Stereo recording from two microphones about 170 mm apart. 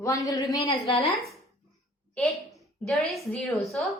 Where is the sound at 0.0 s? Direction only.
20° left (ahead or behind).